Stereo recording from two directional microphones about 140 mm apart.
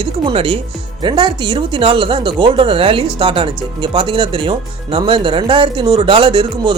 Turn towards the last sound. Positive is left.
turn(degrees=-35)  # may be behind; listen again after turning